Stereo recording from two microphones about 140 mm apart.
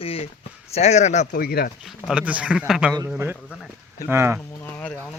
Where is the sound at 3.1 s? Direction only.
15° right (ahead or behind).